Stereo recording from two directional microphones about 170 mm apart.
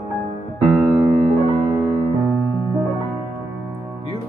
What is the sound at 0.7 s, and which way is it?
Music, 5° right (ahead or behind).